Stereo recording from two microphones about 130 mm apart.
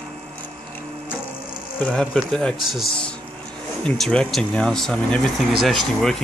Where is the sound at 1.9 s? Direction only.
5° left (ahead or behind).